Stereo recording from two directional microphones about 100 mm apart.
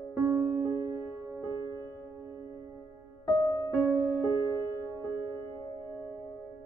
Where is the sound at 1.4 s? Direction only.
35° right (ahead or behind).